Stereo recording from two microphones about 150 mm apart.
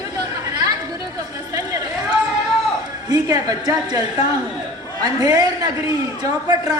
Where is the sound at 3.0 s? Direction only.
25° right (ahead or behind).